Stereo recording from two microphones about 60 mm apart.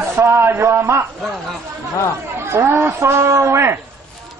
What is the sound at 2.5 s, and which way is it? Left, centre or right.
A man's voice, right.